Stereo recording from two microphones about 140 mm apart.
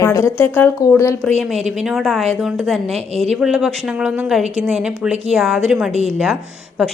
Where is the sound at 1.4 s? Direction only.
Centre (ahead or behind).